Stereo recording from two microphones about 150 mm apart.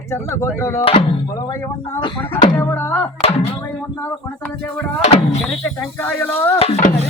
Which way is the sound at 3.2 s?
40° left (ahead or behind).